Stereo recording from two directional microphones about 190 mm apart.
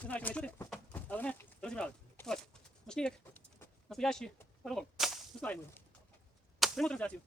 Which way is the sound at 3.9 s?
Centre (ahead or behind).